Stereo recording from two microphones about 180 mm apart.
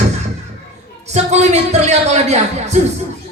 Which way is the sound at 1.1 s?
35° right (ahead or behind).